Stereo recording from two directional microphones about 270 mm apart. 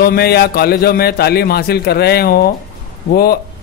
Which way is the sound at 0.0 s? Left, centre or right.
Left.